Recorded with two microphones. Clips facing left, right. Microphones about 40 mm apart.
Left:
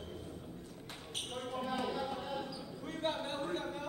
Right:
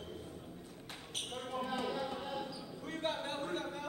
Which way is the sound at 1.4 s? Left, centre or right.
Centre.